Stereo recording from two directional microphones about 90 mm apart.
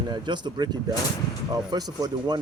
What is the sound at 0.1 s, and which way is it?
Speech, 55° right (ahead or behind).